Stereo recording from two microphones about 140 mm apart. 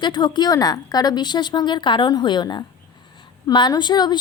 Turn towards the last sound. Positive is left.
turn(degrees=30)  # may be behind; listen again after turning